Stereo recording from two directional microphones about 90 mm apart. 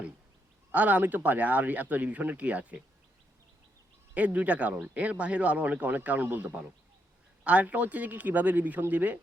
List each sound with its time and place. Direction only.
0.7 s speech: 15° right (ahead or behind)
4.1 s speech: 15° right (ahead or behind)